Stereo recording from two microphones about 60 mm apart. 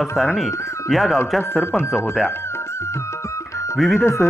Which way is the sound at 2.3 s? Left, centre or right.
Left.